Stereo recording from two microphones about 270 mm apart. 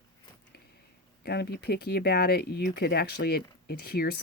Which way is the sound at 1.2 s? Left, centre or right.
Left.